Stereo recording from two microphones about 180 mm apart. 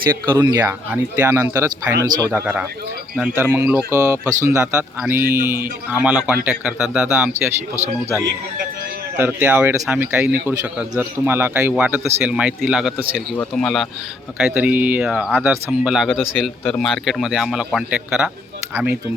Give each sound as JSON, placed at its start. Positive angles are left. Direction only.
{"t": 0.3, "sound": "speech", "side_deg": -20}
{"t": 9.1, "sound": "a man's voice", "side_deg": -10}